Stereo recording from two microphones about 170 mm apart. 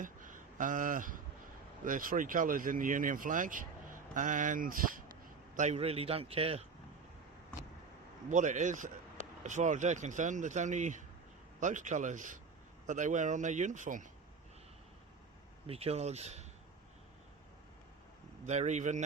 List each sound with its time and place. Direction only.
0.0 s a sound: 50° right (ahead or behind)
1.8 s speech: 55° right (ahead or behind)
5.5 s a man's voice: 40° right (ahead or behind)
8.3 s speech: 50° right (ahead or behind)
15.6 s a man's voice: 35° right (ahead or behind)
18.4 s speech: 45° right (ahead or behind)